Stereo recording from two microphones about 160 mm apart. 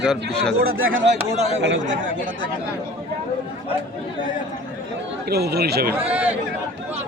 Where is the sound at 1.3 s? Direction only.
45° right (ahead or behind).